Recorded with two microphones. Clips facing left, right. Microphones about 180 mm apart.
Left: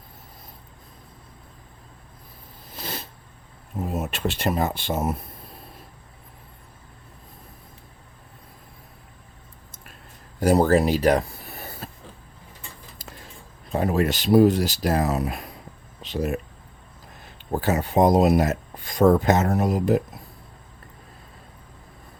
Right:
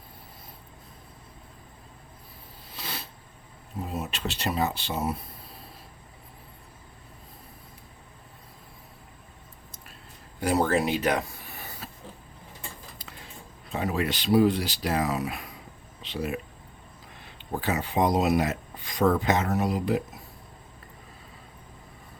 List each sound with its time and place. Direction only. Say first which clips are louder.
2.7 s a sound: left 4 dB; 45° left (ahead or behind)
3.8 s speech: left 6 dB; 50° left (ahead or behind)
10.4 s speech: left 6 dB; 40° left (ahead or behind)
13.7 s speech: left 6 dB; 45° left (ahead or behind)
16.0 s a sound: left 5 dB; 45° left (ahead or behind)
17.5 s speech: left 6 dB; 45° left (ahead or behind)